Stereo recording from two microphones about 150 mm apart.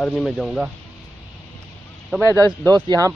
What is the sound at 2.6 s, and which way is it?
Speech, 25° right (ahead or behind).